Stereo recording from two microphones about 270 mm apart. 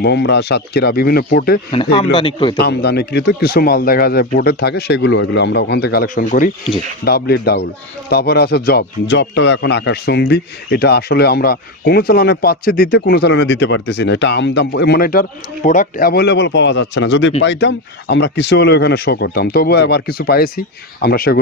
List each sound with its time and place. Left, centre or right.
0.0 s speech: left
1.7 s a man's voice: centre
2.6 s speech: left